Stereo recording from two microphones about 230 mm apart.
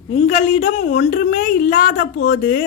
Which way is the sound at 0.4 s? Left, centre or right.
Left.